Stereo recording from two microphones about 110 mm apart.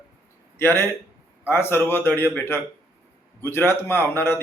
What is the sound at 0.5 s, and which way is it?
A man's voice, 20° left (ahead or behind).